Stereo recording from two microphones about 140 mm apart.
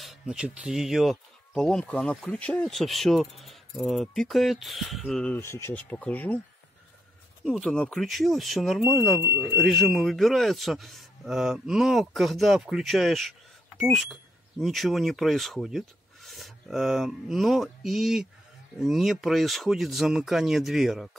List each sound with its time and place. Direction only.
0.0 s speech: 5° right (ahead or behind)
5.4 s speech: 20° left (ahead or behind)
7.4 s speech: centre (ahead or behind)
9.2 s speech: 15° right (ahead or behind)
9.6 s speech: centre (ahead or behind)